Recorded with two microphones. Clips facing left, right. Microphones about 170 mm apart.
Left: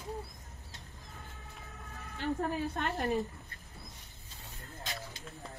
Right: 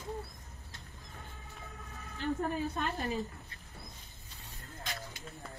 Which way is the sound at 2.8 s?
60° left (ahead or behind).